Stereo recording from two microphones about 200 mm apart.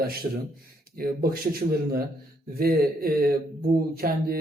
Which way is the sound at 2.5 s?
45° right (ahead or behind).